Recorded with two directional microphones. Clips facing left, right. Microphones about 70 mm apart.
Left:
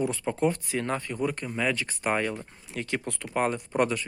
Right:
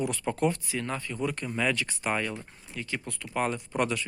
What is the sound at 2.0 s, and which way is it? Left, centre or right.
Speech, left.